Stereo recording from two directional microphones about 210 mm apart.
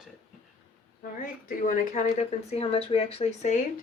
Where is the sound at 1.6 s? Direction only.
35° left (ahead or behind).